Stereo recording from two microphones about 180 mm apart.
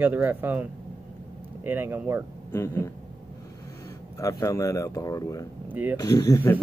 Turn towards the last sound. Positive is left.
turn(degrees=15)  # may be behind; listen again after turning